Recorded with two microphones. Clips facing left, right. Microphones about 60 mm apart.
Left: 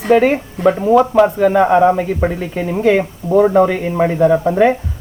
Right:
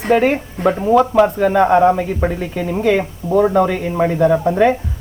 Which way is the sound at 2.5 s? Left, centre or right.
Left.